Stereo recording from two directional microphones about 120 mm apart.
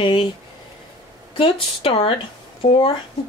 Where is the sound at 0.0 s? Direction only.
40° left (ahead or behind).